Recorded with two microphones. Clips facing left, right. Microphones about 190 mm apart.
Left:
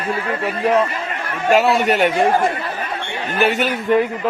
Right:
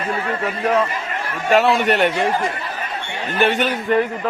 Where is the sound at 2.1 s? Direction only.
50° left (ahead or behind).